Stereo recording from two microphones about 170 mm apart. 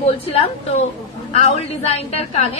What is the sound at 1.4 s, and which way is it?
A woman's voice, 40° left (ahead or behind).